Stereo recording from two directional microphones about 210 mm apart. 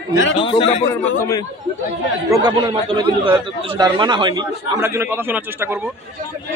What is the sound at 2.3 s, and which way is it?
A man's voice, 20° right (ahead or behind).